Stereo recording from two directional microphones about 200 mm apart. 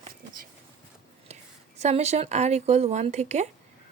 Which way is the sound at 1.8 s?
35° right (ahead or behind).